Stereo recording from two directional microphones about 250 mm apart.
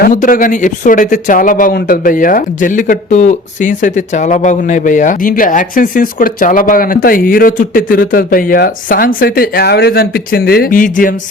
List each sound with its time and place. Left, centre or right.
0.0 s speech: left